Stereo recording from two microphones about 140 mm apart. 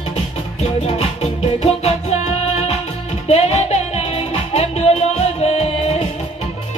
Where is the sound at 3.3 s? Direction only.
50° left (ahead or behind).